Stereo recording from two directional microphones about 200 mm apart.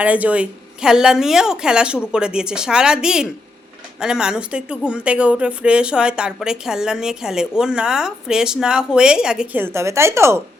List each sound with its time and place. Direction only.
0.0 s a woman's voice: 5° right (ahead or behind)